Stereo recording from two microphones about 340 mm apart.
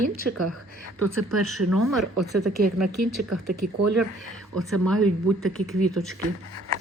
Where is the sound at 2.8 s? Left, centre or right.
Right.